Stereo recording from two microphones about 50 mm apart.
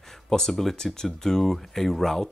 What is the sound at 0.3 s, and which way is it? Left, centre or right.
Speech, centre.